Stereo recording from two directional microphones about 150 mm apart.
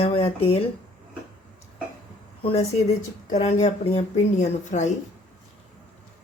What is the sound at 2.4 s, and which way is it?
Speech, 40° left (ahead or behind).